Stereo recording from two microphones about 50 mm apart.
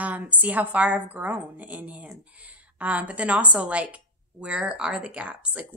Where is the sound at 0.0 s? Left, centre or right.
Right.